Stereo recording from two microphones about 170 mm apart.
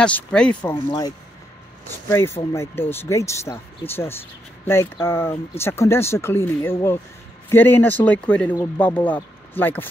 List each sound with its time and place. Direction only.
0.0 s speech: 5° left (ahead or behind)
0.8 s speech: 20° left (ahead or behind)